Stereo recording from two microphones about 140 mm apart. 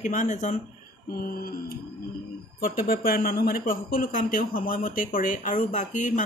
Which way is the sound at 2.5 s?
90° left.